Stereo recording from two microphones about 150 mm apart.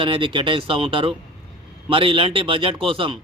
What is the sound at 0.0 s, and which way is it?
A man's voice, 35° right (ahead or behind).